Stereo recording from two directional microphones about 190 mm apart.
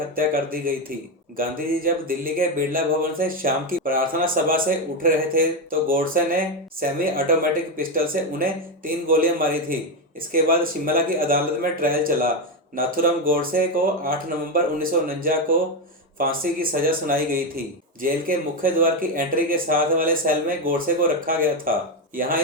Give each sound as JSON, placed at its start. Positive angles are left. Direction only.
{"t": 0.2, "sound": "speech", "side_deg": -50}
{"t": 6.7, "sound": "speech", "side_deg": -50}